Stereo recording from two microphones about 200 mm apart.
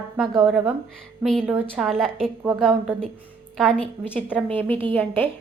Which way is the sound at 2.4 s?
10° right (ahead or behind).